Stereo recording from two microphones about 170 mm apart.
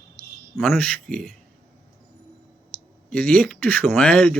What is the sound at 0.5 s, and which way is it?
Speech, centre (ahead or behind).